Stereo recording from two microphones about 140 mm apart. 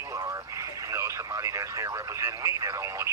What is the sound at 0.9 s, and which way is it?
Speech, 20° right (ahead or behind).